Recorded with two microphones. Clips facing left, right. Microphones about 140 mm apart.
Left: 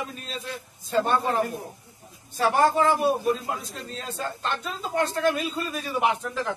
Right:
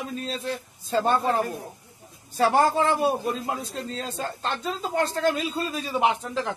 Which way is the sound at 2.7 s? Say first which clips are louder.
Left 1 dB; 25° right (ahead or behind).